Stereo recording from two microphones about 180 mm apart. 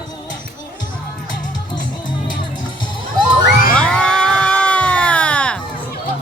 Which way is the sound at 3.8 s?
5° left (ahead or behind).